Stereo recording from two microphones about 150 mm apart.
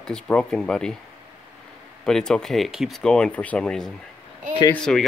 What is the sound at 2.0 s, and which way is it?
Speech, 5° left (ahead or behind).